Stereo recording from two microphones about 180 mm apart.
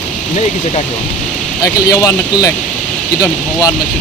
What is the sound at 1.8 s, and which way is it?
Speech, 15° left (ahead or behind).